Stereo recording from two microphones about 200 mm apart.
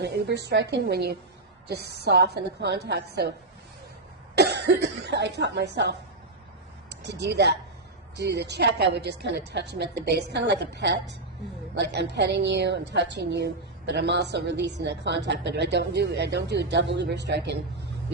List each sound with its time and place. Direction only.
0.0 s a woman's voice: 55° right (ahead or behind)
4.4 s speech: 55° right (ahead or behind)
7.0 s a woman's voice: 60° right (ahead or behind)